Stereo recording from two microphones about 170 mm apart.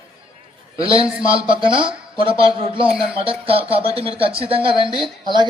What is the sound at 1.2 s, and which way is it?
Speech, 30° right (ahead or behind).